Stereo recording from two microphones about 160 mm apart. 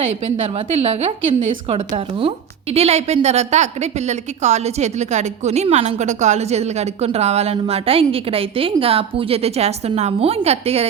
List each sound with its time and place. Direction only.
0.5 s a woman's voice: 35° right (ahead or behind)